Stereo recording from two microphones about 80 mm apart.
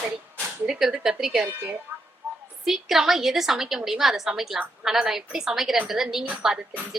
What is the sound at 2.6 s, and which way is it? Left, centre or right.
A woman's voice, centre.